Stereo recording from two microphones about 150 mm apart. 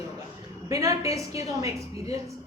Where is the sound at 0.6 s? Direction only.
20° right (ahead or behind).